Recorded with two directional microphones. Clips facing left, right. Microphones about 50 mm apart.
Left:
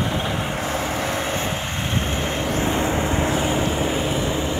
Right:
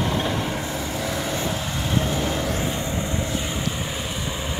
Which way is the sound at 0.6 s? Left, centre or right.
Left.